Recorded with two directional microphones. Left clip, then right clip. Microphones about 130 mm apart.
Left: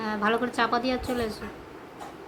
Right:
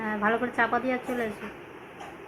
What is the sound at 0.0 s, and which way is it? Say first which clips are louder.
A woman's voice: left 1 dB; 20° left (ahead or behind).